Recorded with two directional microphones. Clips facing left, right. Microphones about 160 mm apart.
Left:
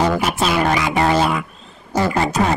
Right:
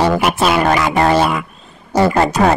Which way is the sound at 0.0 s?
70° right (ahead or behind).